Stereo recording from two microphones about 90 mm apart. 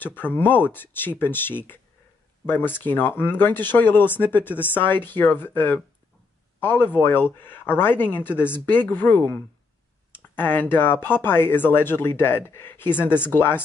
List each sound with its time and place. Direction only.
0.0 s speech: 20° left (ahead or behind)